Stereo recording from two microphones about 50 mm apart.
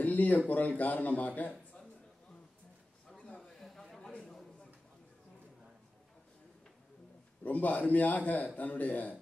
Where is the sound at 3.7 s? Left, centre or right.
Centre.